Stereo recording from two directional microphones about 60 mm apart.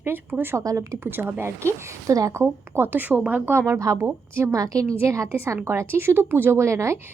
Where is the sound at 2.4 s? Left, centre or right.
Right.